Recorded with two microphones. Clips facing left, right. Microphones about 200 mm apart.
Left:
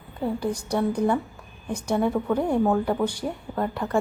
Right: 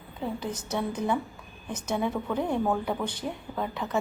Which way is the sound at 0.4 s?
10° left (ahead or behind).